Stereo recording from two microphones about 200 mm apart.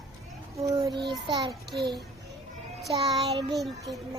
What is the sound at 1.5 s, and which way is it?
Speech, centre (ahead or behind).